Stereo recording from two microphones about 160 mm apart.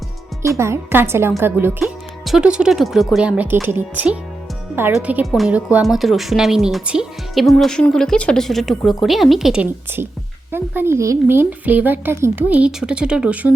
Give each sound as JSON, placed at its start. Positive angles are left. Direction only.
{"t": 0.4, "sound": "a woman's voice", "side_deg": -20}
{"t": 1.8, "sound": "a woman's voice", "side_deg": 0}